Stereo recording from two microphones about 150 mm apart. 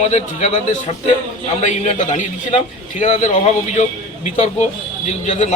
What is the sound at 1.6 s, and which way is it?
A man's voice, 50° left (ahead or behind).